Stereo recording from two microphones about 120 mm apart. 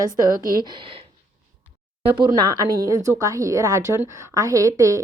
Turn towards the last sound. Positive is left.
turn(degrees=-30)  # may be behind; listen again after turning